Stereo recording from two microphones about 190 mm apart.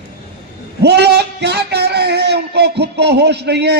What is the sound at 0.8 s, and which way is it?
A man's voice, 60° right (ahead or behind).